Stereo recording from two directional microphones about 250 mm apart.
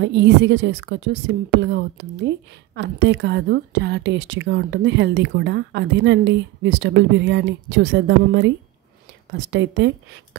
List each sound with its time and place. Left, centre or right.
0.0 s speech: right